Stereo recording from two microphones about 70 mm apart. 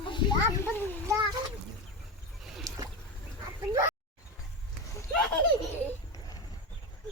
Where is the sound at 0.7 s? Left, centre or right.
Left.